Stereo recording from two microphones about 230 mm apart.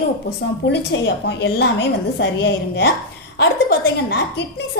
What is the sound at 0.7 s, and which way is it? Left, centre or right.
A woman's voice, left.